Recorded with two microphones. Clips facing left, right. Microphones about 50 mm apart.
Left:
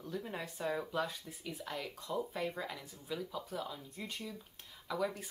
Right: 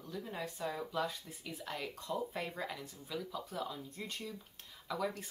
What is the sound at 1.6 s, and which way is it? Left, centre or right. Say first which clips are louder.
Speech: right 1 dB; centre.